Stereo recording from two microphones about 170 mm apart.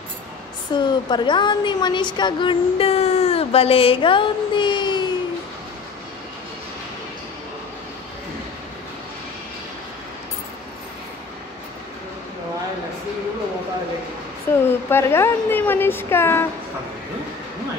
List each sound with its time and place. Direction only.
0.7 s speech: 25° left (ahead or behind)
14.5 s a sound: 15° left (ahead or behind)
14.9 s a woman's voice: 15° left (ahead or behind)